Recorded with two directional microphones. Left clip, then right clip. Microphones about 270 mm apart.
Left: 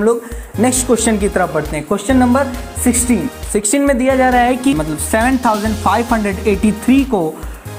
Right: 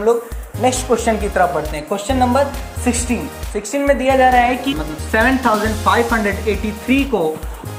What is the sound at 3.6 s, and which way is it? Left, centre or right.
Speech, left.